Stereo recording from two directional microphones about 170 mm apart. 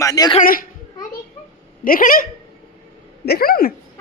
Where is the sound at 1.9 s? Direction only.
55° left (ahead or behind).